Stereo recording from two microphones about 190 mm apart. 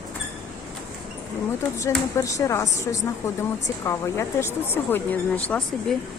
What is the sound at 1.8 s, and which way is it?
Speech, 15° left (ahead or behind).